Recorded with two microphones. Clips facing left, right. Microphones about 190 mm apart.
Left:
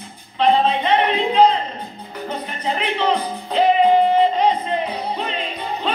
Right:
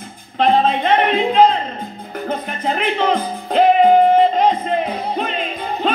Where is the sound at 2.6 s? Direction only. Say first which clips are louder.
Right 2 dB; 50° right (ahead or behind).